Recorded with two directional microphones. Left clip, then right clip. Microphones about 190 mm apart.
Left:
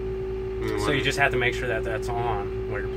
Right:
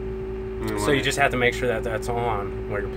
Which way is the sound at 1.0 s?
65° right (ahead or behind).